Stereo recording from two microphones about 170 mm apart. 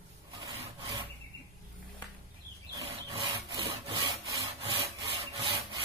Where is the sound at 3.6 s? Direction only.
30° right (ahead or behind).